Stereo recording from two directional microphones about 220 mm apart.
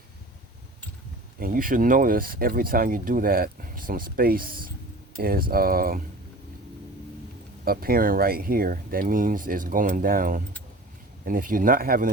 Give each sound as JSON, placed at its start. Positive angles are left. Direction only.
{"t": 1.4, "sound": "speech", "side_deg": -40}
{"t": 7.6, "sound": "speech", "side_deg": -40}